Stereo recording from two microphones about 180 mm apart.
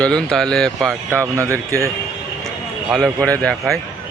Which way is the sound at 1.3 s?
15° right (ahead or behind).